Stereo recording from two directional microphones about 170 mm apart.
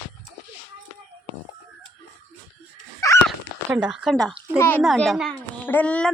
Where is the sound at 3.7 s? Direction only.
5° right (ahead or behind).